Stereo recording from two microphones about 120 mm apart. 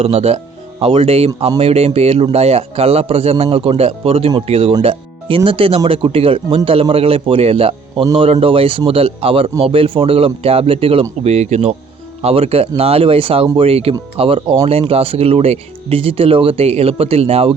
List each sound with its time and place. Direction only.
0.0 s a man's voice: 55° right (ahead or behind)
4.8 s music: 50° right (ahead or behind)
5.4 s speech: 45° right (ahead or behind)
11.2 s a man's voice: 65° right (ahead or behind)